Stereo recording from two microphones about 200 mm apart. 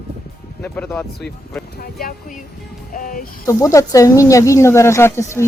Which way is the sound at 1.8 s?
45° left (ahead or behind).